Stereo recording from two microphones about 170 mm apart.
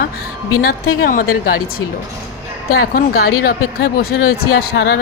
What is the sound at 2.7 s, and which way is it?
Speech, 60° left (ahead or behind).